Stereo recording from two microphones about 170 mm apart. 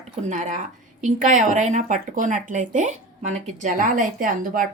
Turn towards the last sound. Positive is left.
turn(degrees=-55)  # may be behind; listen again after turning